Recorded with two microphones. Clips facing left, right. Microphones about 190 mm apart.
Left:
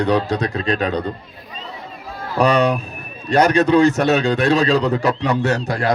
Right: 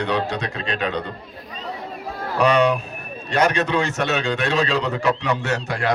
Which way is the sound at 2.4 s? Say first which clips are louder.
Left 2 dB; 35° left (ahead or behind).